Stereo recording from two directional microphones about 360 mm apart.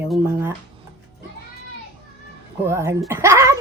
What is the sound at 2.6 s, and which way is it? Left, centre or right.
Speech, centre.